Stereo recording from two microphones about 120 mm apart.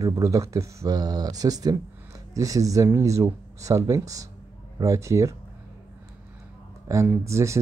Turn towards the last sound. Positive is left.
turn(degrees=-25)  # may be behind; listen again after turning